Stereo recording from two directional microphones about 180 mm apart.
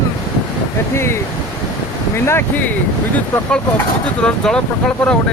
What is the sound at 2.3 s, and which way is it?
Speech, 10° left (ahead or behind).